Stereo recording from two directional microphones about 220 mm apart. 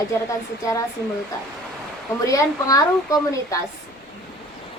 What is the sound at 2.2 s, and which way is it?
Speech, 15° left (ahead or behind).